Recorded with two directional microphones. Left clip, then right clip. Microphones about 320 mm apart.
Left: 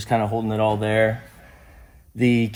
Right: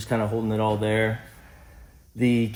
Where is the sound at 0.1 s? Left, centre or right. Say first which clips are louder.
Left 4 dB; left.